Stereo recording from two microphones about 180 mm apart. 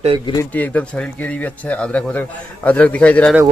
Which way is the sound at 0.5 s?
10° left (ahead or behind).